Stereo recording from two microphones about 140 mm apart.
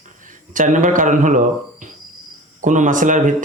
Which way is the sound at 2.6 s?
65° right (ahead or behind).